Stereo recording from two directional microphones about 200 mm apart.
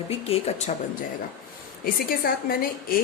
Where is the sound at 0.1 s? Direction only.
30° left (ahead or behind).